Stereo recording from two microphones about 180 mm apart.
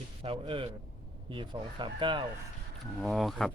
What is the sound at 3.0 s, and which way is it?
Speech, centre (ahead or behind).